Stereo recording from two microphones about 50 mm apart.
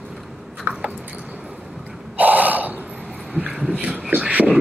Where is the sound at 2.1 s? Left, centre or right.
Right.